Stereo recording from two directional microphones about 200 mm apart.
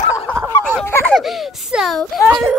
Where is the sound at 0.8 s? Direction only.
10° left (ahead or behind).